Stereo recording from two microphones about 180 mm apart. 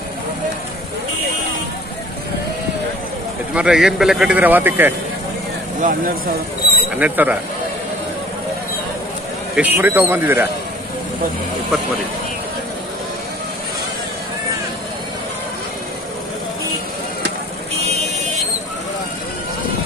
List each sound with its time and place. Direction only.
3.5 s a man's voice: 5° right (ahead or behind)
5.8 s speech: 50° right (ahead or behind)
7.0 s a man's voice: 10° right (ahead or behind)
9.6 s a man's voice: 10° right (ahead or behind)